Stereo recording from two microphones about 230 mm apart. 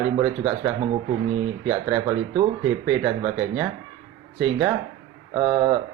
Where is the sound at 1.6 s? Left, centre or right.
Centre.